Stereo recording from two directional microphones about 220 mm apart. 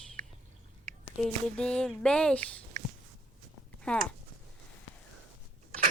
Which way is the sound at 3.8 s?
5° left (ahead or behind).